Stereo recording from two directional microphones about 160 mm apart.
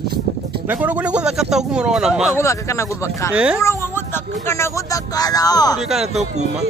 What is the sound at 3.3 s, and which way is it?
Speech, 5° right (ahead or behind).